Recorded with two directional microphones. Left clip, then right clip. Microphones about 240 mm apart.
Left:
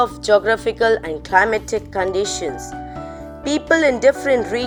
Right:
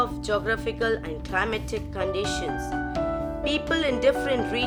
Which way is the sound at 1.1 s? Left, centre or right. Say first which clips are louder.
Left 11 dB; centre.